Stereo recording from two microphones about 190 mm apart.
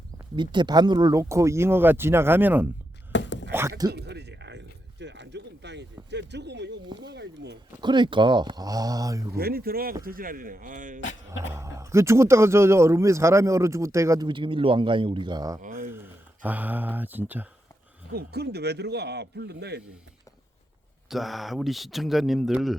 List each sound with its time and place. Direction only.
0.3 s speech: 25° right (ahead or behind)
3.1 s a sound: 70° left (ahead or behind)
3.5 s speech: 15° right (ahead or behind)
3.9 s a sound: 60° right (ahead or behind)
6.8 s speech: 25° right (ahead or behind)
7.1 s speech: 65° right (ahead or behind)
7.8 s speech: 25° right (ahead or behind)
9.4 s speech: 55° right (ahead or behind)
11.5 s speech: 15° right (ahead or behind)
15.6 s a sound: 50° right (ahead or behind)
15.9 s speech: 10° right (ahead or behind)
18.1 s a man's voice: 55° right (ahead or behind)
21.1 s speech: centre (ahead or behind)